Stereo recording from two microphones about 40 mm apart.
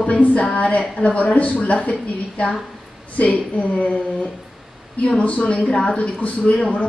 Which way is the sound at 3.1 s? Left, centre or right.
Left.